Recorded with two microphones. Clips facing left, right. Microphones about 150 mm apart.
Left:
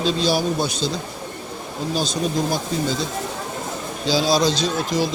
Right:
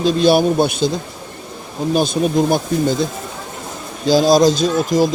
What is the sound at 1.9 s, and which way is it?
Speech, 55° right (ahead or behind).